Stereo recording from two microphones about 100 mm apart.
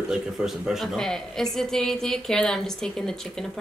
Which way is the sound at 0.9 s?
5° left (ahead or behind).